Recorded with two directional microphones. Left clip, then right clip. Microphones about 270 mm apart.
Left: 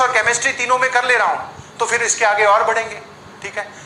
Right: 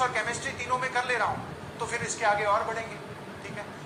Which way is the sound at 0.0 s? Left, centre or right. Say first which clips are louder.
Left 13 dB; left.